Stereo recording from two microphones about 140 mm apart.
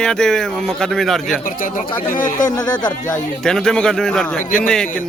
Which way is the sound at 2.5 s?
30° left (ahead or behind).